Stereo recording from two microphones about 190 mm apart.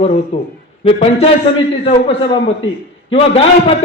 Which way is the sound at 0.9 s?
30° left (ahead or behind).